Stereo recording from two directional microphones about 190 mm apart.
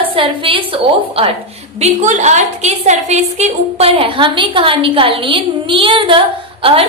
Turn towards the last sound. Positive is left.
turn(degrees=-30)  # may be behind; listen again after turning